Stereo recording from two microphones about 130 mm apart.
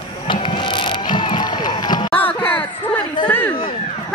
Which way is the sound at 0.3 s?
40° left (ahead or behind).